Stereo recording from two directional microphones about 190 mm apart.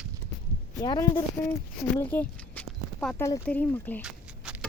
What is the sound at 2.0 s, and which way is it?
Speech, 10° left (ahead or behind).